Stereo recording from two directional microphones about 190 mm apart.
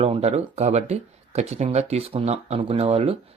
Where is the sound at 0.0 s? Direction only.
35° right (ahead or behind).